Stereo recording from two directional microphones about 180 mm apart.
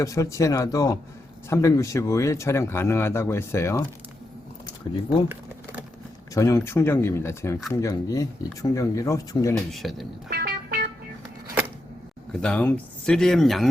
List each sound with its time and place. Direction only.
0.0 s speech: 20° left (ahead or behind)
6.3 s speech: 20° left (ahead or behind)
9.7 s speech: centre (ahead or behind)
10.2 s music: 55° right (ahead or behind)
12.3 s speech: 5° left (ahead or behind)